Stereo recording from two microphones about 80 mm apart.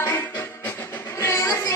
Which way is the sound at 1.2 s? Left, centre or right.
Left.